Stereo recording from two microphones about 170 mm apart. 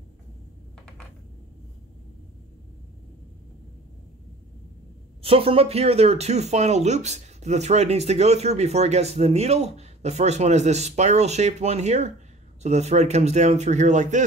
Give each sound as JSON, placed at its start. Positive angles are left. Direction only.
{"t": 5.2, "sound": "speech", "side_deg": -35}